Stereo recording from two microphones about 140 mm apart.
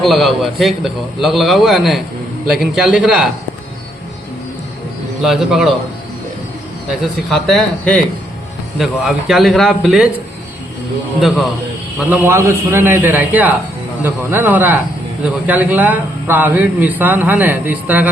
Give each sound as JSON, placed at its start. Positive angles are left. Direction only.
{"t": 0.0, "sound": "a man's voice", "side_deg": 0}
{"t": 5.2, "sound": "a man's voice", "side_deg": 0}
{"t": 7.3, "sound": "a man's voice", "side_deg": 0}
{"t": 11.2, "sound": "a man's voice", "side_deg": 0}
{"t": 12.3, "sound": "a man's voice", "side_deg": -20}